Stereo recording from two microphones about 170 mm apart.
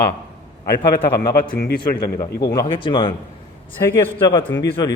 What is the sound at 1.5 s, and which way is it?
Speech, 70° left (ahead or behind).